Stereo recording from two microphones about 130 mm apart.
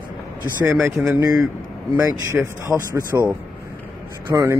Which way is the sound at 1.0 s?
5° right (ahead or behind).